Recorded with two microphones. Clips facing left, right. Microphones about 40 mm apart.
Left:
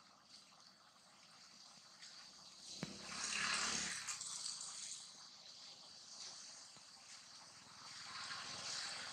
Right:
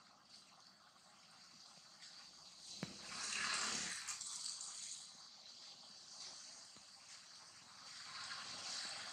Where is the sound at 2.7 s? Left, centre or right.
Centre.